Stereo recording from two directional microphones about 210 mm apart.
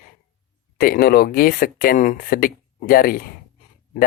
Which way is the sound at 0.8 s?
45° left (ahead or behind).